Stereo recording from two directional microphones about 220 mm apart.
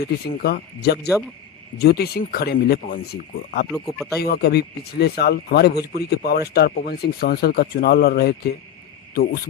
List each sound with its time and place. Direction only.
0.0 s speech: 45° left (ahead or behind)
3.7 s speech: centre (ahead or behind)
4.2 s speech: 45° left (ahead or behind)